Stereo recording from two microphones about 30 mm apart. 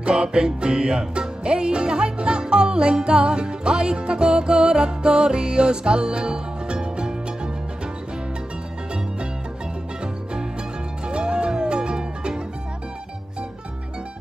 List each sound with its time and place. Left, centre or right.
0.0 s music: right
11.1 s music: right